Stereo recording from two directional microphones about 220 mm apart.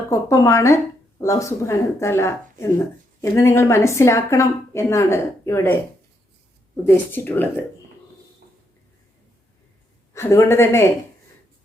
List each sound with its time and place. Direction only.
0.1 s speech: 15° left (ahead or behind)
7.1 s speech: 10° left (ahead or behind)
10.2 s speech: 10° left (ahead or behind)